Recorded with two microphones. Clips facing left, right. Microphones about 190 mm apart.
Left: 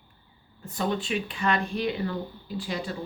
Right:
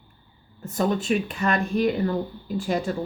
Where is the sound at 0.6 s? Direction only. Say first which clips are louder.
Right 5 dB; 45° right (ahead or behind).